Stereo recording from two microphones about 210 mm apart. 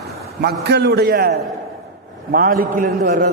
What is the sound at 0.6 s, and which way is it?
A man's voice, 55° right (ahead or behind).